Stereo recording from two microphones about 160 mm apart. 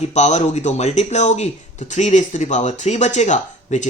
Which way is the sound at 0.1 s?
45° left (ahead or behind).